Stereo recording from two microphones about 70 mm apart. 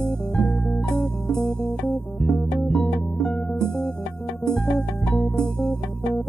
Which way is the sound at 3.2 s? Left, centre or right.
Centre.